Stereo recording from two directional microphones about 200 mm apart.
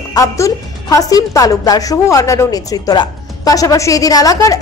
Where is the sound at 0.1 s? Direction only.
15° left (ahead or behind).